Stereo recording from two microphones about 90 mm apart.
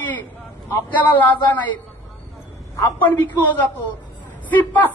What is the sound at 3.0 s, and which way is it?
A man's voice, 20° left (ahead or behind).